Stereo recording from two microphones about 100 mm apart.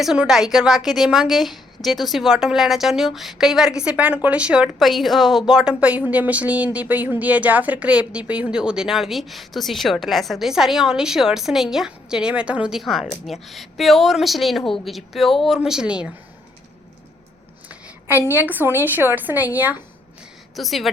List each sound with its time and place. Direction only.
0.0 s speech: 5° right (ahead or behind)
18.3 s a woman's voice: 20° right (ahead or behind)
20.6 s speech: centre (ahead or behind)